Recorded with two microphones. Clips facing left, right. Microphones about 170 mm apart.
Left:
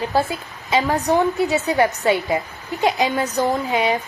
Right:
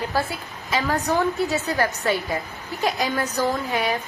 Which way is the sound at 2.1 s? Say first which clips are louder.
Left 5 dB; 20° left (ahead or behind).